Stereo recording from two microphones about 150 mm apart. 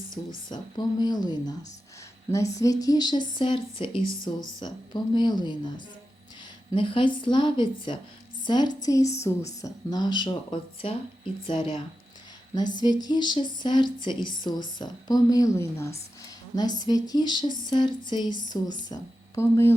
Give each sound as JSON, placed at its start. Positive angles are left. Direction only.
{"t": 0.5, "sound": "speech", "side_deg": 30}
{"t": 2.8, "sound": "speech", "side_deg": 25}
{"t": 6.7, "sound": "speech", "side_deg": 35}